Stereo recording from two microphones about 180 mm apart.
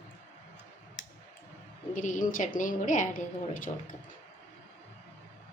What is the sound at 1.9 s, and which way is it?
A woman's voice, 45° left (ahead or behind).